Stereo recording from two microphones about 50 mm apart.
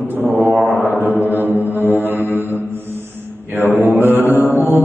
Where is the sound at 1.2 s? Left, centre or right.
Right.